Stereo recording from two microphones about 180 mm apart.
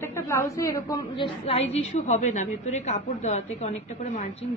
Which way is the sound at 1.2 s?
35° left (ahead or behind).